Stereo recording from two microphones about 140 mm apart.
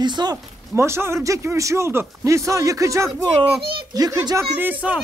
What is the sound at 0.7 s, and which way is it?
Speech, 20° right (ahead or behind).